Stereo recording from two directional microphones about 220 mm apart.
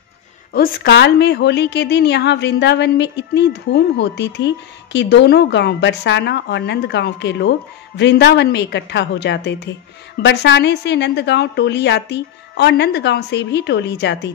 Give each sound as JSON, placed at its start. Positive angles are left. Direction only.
{"t": 0.5, "sound": "a woman's voice", "side_deg": 45}